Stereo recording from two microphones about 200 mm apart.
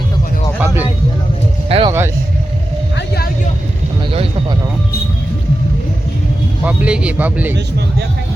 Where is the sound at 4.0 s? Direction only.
30° right (ahead or behind).